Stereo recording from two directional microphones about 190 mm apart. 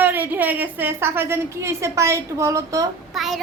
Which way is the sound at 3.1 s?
Centre (ahead or behind).